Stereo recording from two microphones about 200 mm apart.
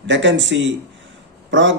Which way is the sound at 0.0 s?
65° right (ahead or behind).